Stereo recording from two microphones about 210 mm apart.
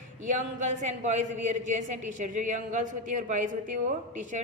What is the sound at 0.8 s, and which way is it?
A woman's voice, 35° right (ahead or behind).